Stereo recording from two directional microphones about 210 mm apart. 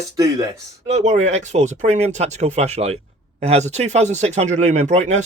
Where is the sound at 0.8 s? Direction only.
35° right (ahead or behind).